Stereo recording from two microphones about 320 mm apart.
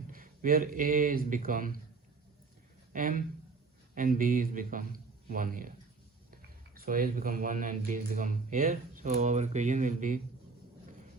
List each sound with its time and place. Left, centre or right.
0.1 s speech: right
2.9 s speech: right
6.7 s speech: right